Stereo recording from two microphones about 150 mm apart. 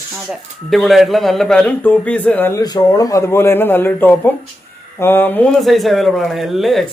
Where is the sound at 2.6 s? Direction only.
25° left (ahead or behind).